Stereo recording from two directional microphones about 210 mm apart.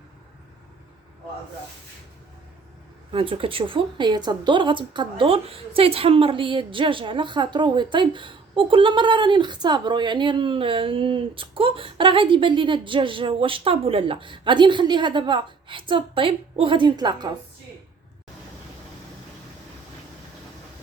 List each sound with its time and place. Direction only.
3.1 s speech: 25° right (ahead or behind)